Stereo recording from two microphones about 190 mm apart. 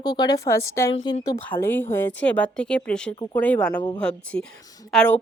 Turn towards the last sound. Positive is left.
turn(degrees=5)  # may be behind; listen again after turning